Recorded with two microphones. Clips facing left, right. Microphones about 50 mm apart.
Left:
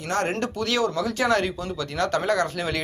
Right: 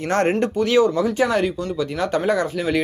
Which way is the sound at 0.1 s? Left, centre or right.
Right.